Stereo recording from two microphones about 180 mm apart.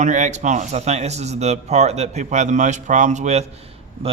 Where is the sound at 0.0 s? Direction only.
40° right (ahead or behind).